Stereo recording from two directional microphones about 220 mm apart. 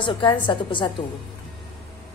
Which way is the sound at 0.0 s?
25° left (ahead or behind).